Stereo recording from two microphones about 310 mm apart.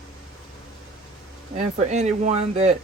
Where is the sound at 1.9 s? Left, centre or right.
Right.